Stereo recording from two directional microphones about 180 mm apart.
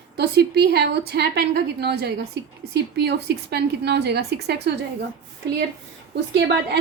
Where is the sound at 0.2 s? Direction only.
65° right (ahead or behind).